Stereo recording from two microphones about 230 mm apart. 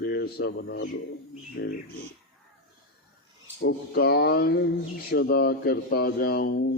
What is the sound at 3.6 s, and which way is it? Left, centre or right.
Speech, left.